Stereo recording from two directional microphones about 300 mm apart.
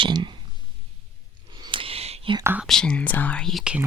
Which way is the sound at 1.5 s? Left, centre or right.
Centre.